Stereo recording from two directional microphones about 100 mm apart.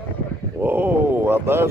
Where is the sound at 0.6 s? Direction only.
20° right (ahead or behind).